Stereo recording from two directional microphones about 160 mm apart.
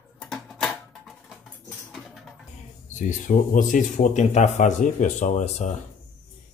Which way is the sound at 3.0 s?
55° left (ahead or behind).